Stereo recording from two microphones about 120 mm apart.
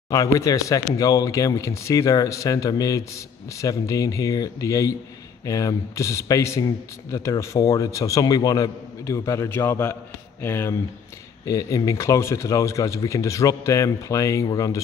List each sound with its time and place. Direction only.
0.1 s speech: 30° left (ahead or behind)